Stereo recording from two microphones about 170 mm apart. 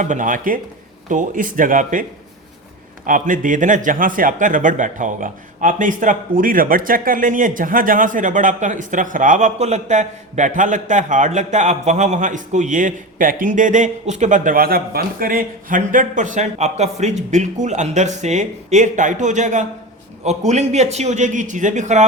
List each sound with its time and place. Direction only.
0.0 s speech: 50° right (ahead or behind)
3.1 s speech: 50° right (ahead or behind)